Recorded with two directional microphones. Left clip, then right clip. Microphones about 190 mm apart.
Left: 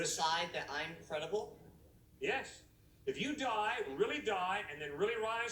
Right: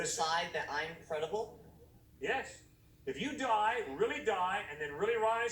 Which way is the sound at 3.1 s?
15° left (ahead or behind).